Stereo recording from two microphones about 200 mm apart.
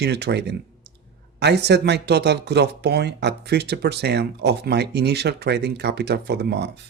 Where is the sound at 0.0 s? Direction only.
55° right (ahead or behind).